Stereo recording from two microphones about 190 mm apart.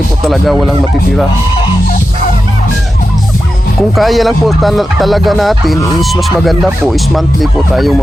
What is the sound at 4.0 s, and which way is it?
Speech, centre (ahead or behind).